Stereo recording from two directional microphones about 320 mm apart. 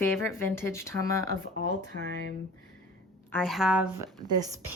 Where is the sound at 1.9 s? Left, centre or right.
Right.